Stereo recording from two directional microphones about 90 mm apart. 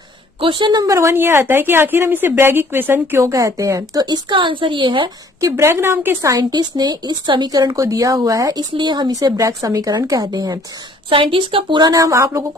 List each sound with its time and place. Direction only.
0.4 s a woman's voice: 65° right (ahead or behind)
0.8 s a woman's voice: 35° right (ahead or behind)
4.3 s a woman's voice: 65° right (ahead or behind)
5.4 s a woman's voice: 30° right (ahead or behind)
6.3 s a woman's voice: 50° right (ahead or behind)
11.1 s a woman's voice: 75° right (ahead or behind)
11.8 s speech: 40° right (ahead or behind)